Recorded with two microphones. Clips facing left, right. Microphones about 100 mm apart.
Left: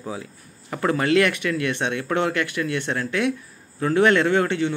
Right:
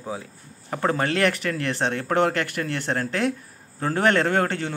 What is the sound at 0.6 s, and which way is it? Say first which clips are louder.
Speech: left 2 dB; 30° right (ahead or behind).